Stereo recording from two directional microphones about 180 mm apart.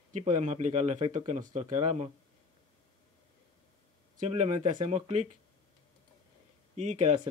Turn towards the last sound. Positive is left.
turn(degrees=-40)  # may be behind; listen again after turning